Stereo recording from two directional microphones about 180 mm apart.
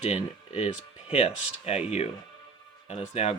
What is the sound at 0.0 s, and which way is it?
Speech, 35° left (ahead or behind).